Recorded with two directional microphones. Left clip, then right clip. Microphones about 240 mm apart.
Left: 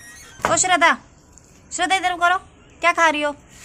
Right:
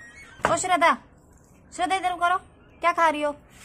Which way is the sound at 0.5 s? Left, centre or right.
Centre.